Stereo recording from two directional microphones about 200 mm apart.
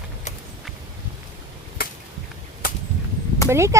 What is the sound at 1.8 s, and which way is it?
Finger snapping, 50° left (ahead or behind).